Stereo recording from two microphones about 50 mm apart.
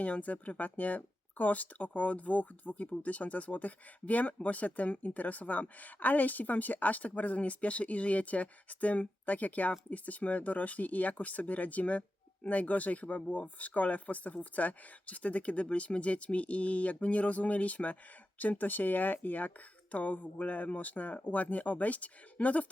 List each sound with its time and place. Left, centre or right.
0.0 s speech: left